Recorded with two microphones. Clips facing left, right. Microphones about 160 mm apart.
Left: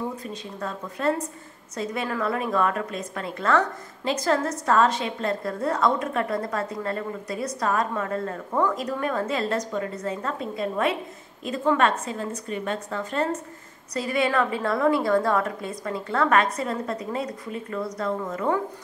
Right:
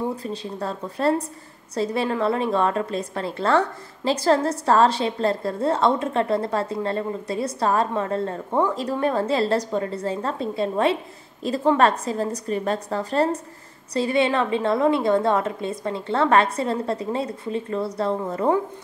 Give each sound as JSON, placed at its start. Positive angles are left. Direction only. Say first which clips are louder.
{"t": 0.2, "sound": "a woman's voice", "louder": "right 4 dB", "side_deg": -30}